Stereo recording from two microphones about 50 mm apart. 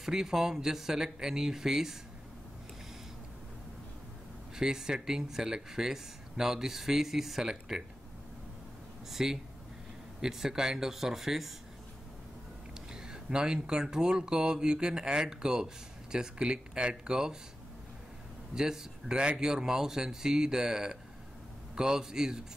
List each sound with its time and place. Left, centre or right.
0.0 s speech: centre
4.6 s speech: centre
9.1 s speech: centre
12.9 s speech: centre
18.5 s speech: centre